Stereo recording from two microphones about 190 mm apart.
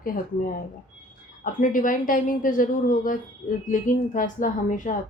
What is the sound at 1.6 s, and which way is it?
Speech, 45° left (ahead or behind).